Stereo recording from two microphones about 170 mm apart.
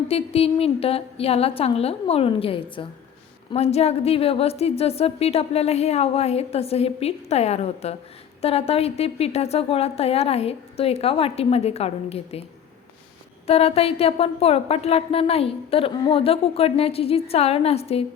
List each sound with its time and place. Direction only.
0.1 s a woman's voice: 35° left (ahead or behind)
13.5 s a woman's voice: 35° left (ahead or behind)